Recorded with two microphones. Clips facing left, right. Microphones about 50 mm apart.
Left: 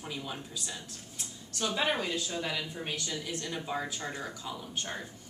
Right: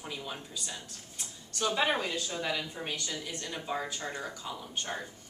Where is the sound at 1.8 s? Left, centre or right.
Centre.